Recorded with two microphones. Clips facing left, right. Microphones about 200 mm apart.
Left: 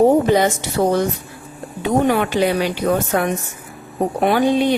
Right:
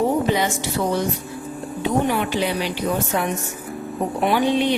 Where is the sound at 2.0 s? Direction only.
55° left (ahead or behind).